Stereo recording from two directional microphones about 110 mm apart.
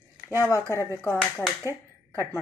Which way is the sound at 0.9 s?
25° left (ahead or behind).